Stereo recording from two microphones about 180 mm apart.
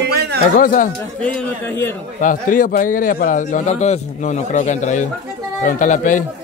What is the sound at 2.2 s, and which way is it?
A man's voice, 50° left (ahead or behind).